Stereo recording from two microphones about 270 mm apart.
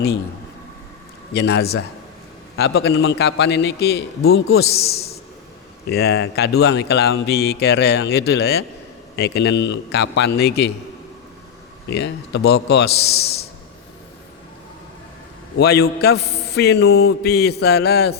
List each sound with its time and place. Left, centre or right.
1.3 s speech: left
4.4 s a man's voice: left
5.9 s speech: left
11.9 s speech: left
15.5 s speech: left